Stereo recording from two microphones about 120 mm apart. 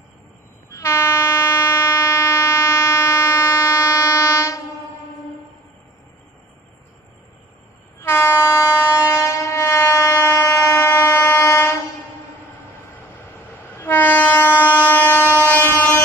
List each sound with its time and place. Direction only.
0.7 s train: 25° left (ahead or behind)
8.0 s train: 20° left (ahead or behind)
13.7 s train: 15° left (ahead or behind)